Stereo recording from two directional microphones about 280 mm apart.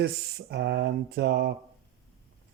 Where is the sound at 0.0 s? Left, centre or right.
Right.